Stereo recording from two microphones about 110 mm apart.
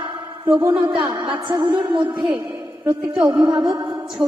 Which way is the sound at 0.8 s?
45° right (ahead or behind).